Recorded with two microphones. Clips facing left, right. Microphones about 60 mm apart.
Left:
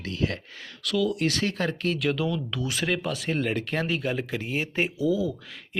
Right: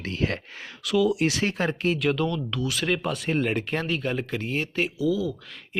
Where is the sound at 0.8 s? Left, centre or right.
Centre.